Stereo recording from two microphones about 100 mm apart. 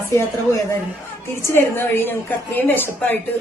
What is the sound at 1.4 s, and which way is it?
A woman's voice, 25° left (ahead or behind).